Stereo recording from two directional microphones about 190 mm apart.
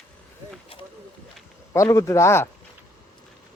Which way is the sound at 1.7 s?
15° left (ahead or behind).